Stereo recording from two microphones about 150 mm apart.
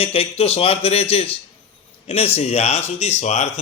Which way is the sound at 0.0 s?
40° left (ahead or behind).